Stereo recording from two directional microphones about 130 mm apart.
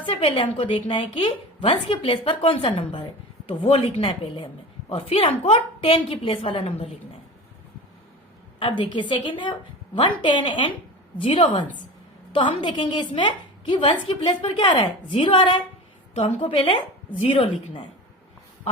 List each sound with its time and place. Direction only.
0.0 s a woman's voice: 45° left (ahead or behind)
8.5 s a woman's voice: 40° left (ahead or behind)
11.2 s a woman's voice: 45° left (ahead or behind)
16.1 s a woman's voice: 50° left (ahead or behind)